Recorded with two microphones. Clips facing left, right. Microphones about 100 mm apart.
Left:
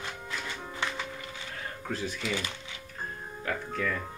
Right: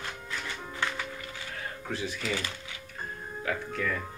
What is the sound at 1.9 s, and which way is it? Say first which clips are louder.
Speech: even; 45° left (ahead or behind).